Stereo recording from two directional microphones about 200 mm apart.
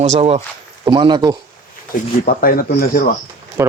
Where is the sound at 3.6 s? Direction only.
15° right (ahead or behind).